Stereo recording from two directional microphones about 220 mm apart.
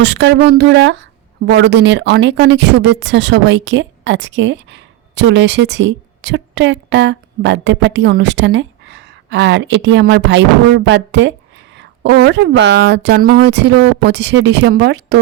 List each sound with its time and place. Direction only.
0.0 s a woman's voice: 50° right (ahead or behind)